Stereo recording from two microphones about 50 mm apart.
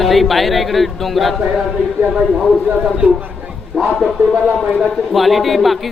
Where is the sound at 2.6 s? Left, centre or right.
Right.